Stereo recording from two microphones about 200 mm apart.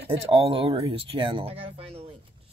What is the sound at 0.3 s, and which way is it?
Speech, 25° right (ahead or behind).